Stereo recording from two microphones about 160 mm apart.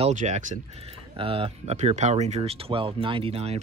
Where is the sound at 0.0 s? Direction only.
50° right (ahead or behind).